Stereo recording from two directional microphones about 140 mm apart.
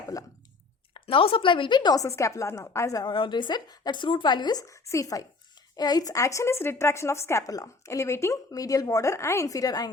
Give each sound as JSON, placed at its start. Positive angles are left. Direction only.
{"t": 0.1, "sound": "speech", "side_deg": 25}
{"t": 1.0, "sound": "speech", "side_deg": 40}